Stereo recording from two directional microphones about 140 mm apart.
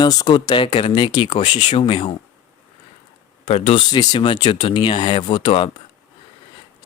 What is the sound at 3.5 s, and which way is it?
Speech, 45° left (ahead or behind).